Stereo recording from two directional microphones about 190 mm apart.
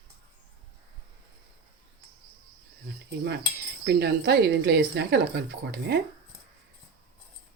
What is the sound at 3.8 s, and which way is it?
A woman's voice, 60° right (ahead or behind).